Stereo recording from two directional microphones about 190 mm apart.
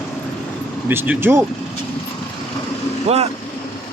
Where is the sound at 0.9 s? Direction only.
10° right (ahead or behind).